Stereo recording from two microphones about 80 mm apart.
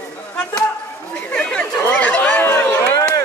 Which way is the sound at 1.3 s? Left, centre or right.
Centre.